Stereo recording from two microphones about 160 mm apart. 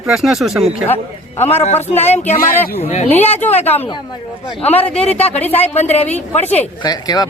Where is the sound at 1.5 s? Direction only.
40° left (ahead or behind).